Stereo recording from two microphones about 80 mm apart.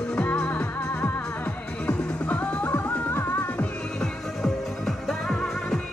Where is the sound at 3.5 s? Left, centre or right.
Centre.